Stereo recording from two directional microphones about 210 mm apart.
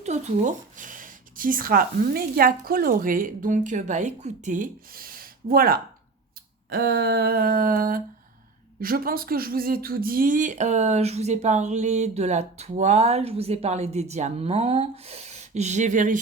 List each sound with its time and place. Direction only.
0.0 s speech: 35° right (ahead or behind)
6.7 s a sound: 45° right (ahead or behind)
8.8 s speech: 45° right (ahead or behind)